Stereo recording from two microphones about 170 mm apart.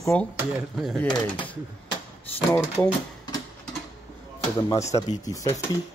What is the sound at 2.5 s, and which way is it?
Speech, 15° left (ahead or behind).